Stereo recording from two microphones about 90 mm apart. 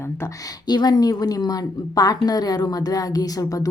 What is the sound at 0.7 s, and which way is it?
A woman's voice, 50° left (ahead or behind).